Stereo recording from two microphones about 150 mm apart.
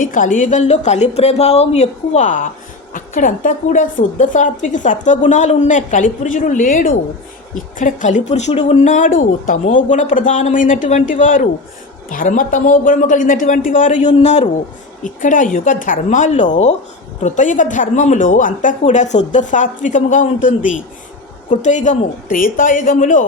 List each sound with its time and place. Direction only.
0.0 s a woman's voice: 60° left (ahead or behind)
15.0 s speech: 60° left (ahead or behind)